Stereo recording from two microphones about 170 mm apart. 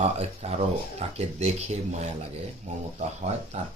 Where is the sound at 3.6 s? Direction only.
40° right (ahead or behind).